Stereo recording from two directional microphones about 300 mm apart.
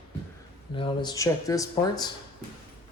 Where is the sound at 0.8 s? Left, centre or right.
Centre.